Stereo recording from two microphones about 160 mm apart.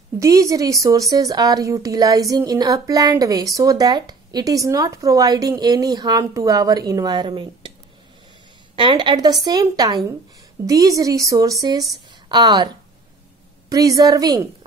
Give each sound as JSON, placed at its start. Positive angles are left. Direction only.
{"t": 0.2, "sound": "a woman's voice", "side_deg": -20}
{"t": 8.7, "sound": "a woman's voice", "side_deg": -30}
{"t": 13.7, "sound": "a woman's voice", "side_deg": -20}